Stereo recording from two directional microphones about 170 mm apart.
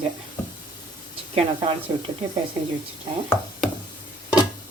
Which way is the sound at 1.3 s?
35° right (ahead or behind).